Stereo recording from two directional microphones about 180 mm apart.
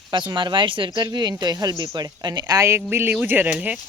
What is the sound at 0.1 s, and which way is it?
Speech, 25° right (ahead or behind).